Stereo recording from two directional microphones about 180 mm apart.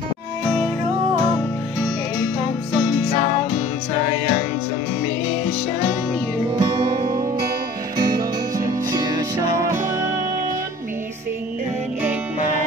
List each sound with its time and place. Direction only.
6.6 s music: 25° right (ahead or behind)